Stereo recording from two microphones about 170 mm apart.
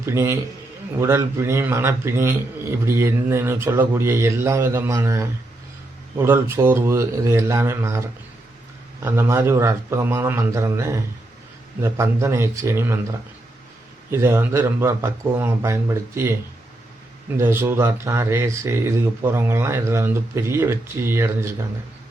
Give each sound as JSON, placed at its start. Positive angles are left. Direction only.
{"t": 0.0, "sound": "a man's voice", "side_deg": -15}
{"t": 17.3, "sound": "a man's voice", "side_deg": -15}